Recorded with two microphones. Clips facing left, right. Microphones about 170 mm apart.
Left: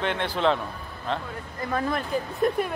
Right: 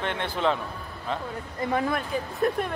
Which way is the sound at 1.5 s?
20° right (ahead or behind).